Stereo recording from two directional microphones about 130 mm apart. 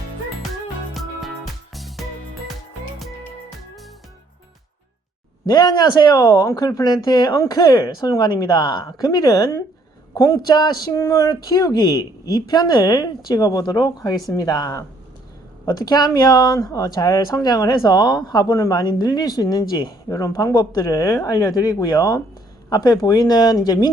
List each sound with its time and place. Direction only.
1.7 s music: centre (ahead or behind)
5.5 s speech: 30° left (ahead or behind)